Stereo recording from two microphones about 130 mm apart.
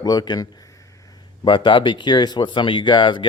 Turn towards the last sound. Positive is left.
turn(degrees=35)  # may be behind; listen again after turning